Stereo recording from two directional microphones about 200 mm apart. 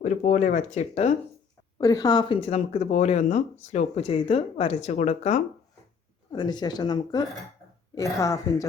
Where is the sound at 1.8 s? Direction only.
20° left (ahead or behind); by 5.4 s 35° left (ahead or behind).